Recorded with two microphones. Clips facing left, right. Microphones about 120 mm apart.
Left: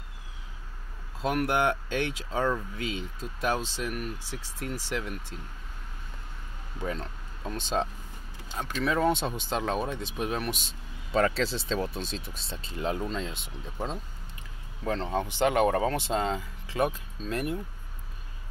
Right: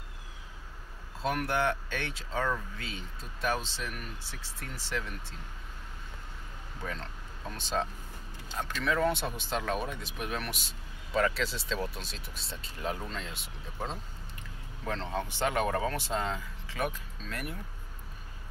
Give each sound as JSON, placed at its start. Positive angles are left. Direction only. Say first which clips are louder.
{"t": 1.2, "sound": "speech", "louder": "left 4 dB", "side_deg": 15}
{"t": 7.4, "sound": "speech", "louder": "left 3 dB", "side_deg": 25}
{"t": 15.2, "sound": "speech", "louder": "left 7 dB", "side_deg": 20}